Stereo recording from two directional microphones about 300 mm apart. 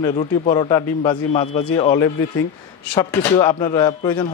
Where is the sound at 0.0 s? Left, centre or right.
Centre.